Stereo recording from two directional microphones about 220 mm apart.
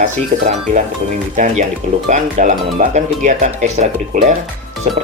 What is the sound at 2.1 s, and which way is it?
Speech, 35° right (ahead or behind).